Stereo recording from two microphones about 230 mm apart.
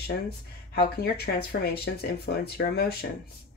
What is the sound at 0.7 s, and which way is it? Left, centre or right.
Speech, left.